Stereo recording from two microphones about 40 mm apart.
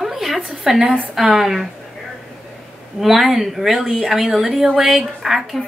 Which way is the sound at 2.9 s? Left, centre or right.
Centre.